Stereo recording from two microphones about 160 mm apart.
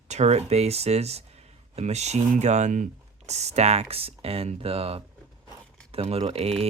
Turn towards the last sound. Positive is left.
turn(degrees=-40)  # may be behind; listen again after turning